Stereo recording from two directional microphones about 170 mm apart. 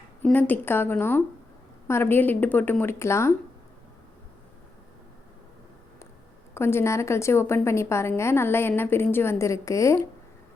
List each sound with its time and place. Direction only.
0.2 s a woman's voice: 10° left (ahead or behind)
6.5 s a woman's voice: 15° left (ahead or behind)